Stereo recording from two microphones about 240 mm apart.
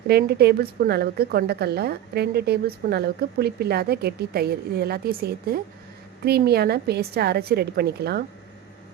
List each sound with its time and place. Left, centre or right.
0.1 s a woman's voice: right